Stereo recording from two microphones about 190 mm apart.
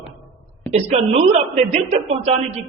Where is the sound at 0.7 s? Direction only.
35° right (ahead or behind).